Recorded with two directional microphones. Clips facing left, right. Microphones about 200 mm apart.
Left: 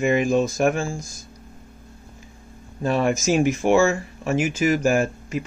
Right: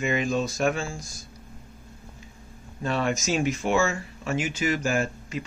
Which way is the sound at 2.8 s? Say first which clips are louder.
Left 5 dB; 45° left (ahead or behind).